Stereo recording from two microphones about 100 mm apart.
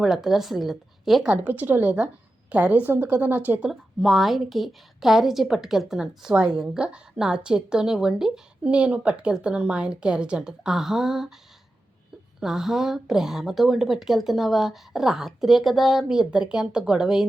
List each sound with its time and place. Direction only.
0.0 s a woman's voice: 5° right (ahead or behind)
1.4 s a woman's voice: 20° right (ahead or behind)
3.7 s a woman's voice: centre (ahead or behind)
12.4 s a woman's voice: 5° right (ahead or behind)